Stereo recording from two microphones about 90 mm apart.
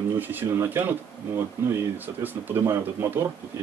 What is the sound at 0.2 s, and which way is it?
Speech, 20° right (ahead or behind).